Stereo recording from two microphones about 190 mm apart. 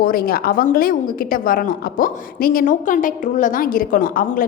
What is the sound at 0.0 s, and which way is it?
A woman's voice, 50° left (ahead or behind).